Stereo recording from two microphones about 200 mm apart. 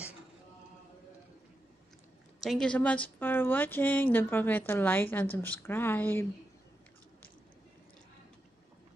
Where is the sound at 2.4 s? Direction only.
5° left (ahead or behind).